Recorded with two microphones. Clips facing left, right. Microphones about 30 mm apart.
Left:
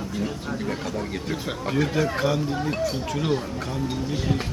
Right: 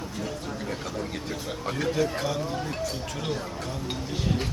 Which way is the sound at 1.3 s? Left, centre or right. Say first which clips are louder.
Left 4 dB; centre.